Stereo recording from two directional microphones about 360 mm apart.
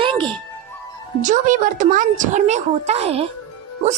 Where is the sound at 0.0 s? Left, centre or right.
Centre.